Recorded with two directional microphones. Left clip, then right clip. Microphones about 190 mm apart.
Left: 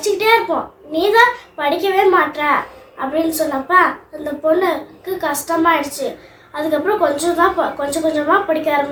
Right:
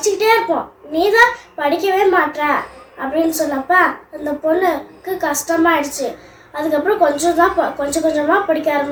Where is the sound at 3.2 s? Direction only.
20° left (ahead or behind).